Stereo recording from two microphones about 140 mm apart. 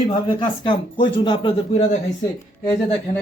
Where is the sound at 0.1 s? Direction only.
40° left (ahead or behind).